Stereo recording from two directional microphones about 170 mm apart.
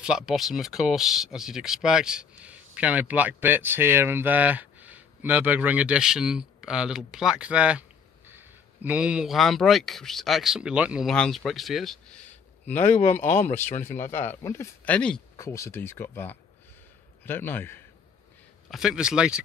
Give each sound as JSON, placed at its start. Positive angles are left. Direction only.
{"t": 0.0, "sound": "a man's voice", "side_deg": -5}
{"t": 12.7, "sound": "speech", "side_deg": 45}
{"t": 14.1, "sound": "speech", "side_deg": 15}
{"t": 15.3, "sound": "speech", "side_deg": 15}
{"t": 18.7, "sound": "speech", "side_deg": -5}